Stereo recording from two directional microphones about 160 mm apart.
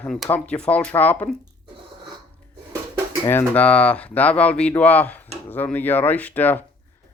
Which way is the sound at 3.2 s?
10° left (ahead or behind).